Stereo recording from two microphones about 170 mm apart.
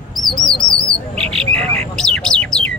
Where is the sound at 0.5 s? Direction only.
5° left (ahead or behind).